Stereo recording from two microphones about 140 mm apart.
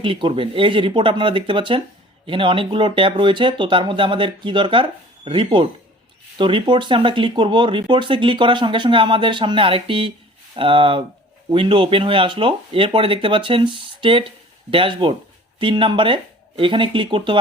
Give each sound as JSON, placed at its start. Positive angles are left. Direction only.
{"t": 0.0, "sound": "speech", "side_deg": -35}